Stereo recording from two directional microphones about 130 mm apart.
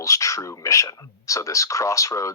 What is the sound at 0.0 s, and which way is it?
Speech, 25° left (ahead or behind).